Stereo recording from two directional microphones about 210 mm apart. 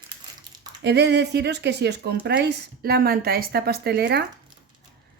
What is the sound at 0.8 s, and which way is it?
Speech, 55° right (ahead or behind).